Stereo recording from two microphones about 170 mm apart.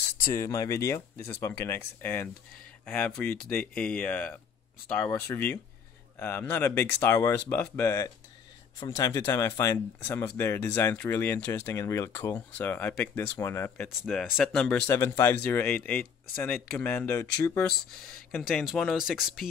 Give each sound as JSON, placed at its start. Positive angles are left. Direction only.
{"t": 0.3, "sound": "speech", "side_deg": 15}
{"t": 13.8, "sound": "speech", "side_deg": 0}
{"t": 18.4, "sound": "speech", "side_deg": 0}